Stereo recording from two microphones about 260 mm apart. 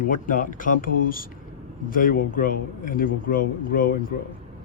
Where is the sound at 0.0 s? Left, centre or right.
Left.